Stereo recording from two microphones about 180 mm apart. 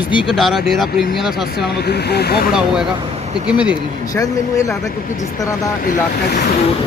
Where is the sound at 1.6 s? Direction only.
65° left (ahead or behind).